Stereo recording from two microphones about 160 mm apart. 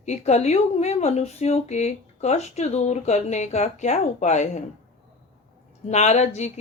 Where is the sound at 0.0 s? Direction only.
45° left (ahead or behind).